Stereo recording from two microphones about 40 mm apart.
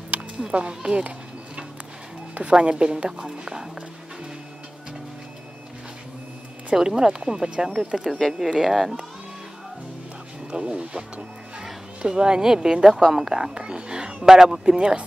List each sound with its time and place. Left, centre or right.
0.5 s speech: right
2.3 s speech: right; by 3.6 s centre
6.8 s speech: centre
8.1 s speech: centre
10.5 s speech: right